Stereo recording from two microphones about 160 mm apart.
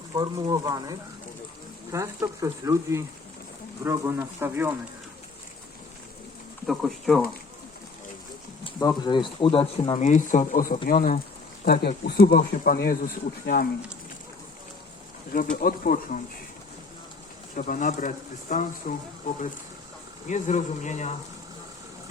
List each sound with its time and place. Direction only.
0.1 s speech: 25° right (ahead or behind)
6.7 s speech: centre (ahead or behind)
8.6 s speech: 25° left (ahead or behind)
10.0 s a man's voice: 50° left (ahead or behind)
11.6 s speech: 65° left (ahead or behind)
13.4 s speech: 65° left (ahead or behind)
15.3 s speech: 60° left (ahead or behind)
17.5 s speech: 55° left (ahead or behind)
20.2 s a man's voice: 50° left (ahead or behind)